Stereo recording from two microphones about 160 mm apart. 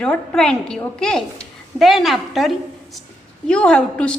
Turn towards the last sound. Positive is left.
turn(degrees=5)  # may be behind; listen again after turning